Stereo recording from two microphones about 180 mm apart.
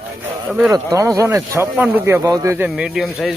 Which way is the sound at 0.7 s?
20° right (ahead or behind).